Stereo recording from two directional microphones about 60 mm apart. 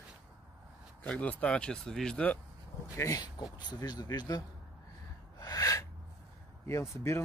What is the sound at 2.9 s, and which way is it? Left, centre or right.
Speech, left.